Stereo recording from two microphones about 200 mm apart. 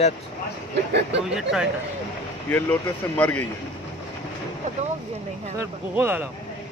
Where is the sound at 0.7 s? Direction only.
60° right (ahead or behind).